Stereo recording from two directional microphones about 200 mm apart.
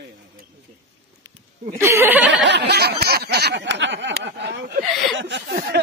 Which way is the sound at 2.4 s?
60° right (ahead or behind).